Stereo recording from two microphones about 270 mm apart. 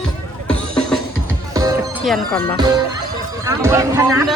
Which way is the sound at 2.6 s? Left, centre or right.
Centre.